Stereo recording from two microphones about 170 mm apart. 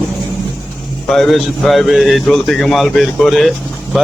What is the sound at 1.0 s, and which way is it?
A man's voice, centre (ahead or behind).